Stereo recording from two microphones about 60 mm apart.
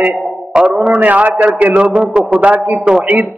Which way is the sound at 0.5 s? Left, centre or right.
Centre.